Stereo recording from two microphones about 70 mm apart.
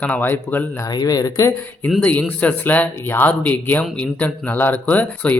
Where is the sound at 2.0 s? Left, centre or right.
Left.